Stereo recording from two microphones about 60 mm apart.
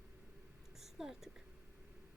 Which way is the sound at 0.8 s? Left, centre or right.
Centre.